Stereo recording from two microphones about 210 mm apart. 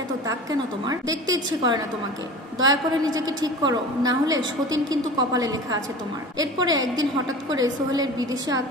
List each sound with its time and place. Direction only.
0.3 s a woman's voice: 15° right (ahead or behind)